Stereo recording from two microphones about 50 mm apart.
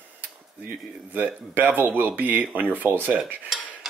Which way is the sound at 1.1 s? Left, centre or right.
Right.